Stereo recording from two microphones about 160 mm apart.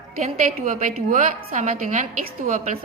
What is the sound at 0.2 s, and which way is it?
A woman's voice, 40° right (ahead or behind).